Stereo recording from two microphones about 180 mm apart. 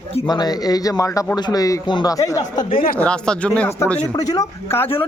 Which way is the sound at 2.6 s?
30° left (ahead or behind).